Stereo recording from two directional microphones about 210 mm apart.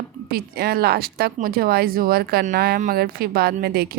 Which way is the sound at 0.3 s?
50° right (ahead or behind).